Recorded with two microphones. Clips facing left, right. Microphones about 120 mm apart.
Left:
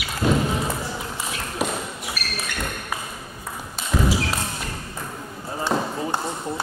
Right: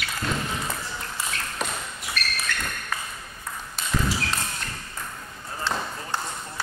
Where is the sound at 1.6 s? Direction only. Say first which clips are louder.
Left 8 dB; 5° left (ahead or behind).